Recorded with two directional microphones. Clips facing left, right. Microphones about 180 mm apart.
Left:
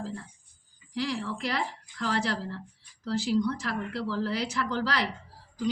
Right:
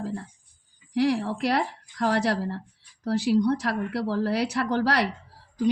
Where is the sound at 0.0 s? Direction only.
60° right (ahead or behind).